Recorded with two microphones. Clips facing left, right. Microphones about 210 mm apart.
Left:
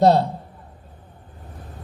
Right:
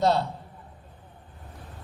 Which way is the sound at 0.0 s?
40° left (ahead or behind).